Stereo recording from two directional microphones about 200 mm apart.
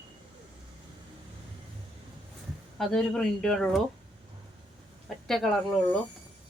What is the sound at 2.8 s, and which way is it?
Speech, centre (ahead or behind).